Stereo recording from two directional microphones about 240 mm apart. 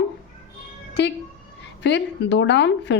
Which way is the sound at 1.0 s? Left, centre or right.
Left.